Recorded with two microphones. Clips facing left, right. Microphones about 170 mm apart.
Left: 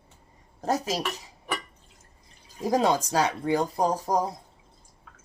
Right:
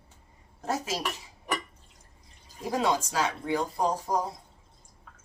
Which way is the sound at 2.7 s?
40° left (ahead or behind).